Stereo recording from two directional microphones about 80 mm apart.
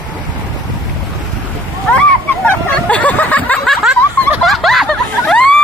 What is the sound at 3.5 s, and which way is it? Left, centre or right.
Snicker, centre.